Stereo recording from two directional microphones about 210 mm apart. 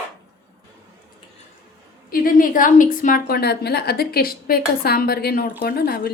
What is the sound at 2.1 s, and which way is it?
A woman's voice, 45° left (ahead or behind).